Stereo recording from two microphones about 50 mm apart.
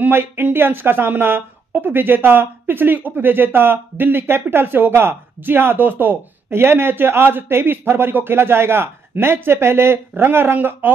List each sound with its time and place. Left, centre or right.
0.1 s speech: right
6.6 s speech: right